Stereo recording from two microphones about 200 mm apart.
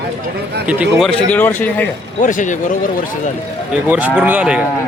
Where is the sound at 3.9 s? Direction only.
10° right (ahead or behind).